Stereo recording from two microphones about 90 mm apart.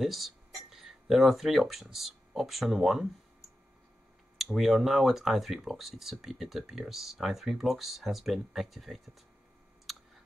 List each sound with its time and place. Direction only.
0.0 s speech: centre (ahead or behind)
4.4 s speech: centre (ahead or behind)
9.9 s clicking: centre (ahead or behind)